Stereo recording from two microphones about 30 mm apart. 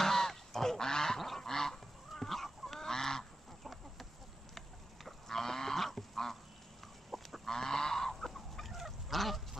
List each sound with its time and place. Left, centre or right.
0.0 s goose: centre
1.2 s goose: centre
1.5 s goose: centre
2.2 s chicken: centre
2.8 s goose: centre
3.6 s chicken: centre
4.6 s livestock: centre
7.1 s goose: centre
7.4 s goose: centre